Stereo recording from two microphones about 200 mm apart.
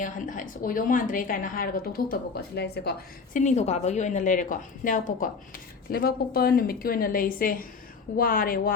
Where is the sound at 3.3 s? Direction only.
35° left (ahead or behind).